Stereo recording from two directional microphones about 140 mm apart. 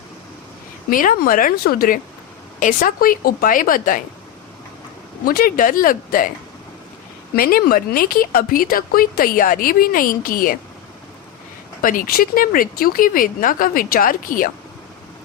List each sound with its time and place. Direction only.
0.9 s speech: 80° left
5.2 s speech: 90° left
7.3 s speech: 90° left
11.8 s speech: 80° left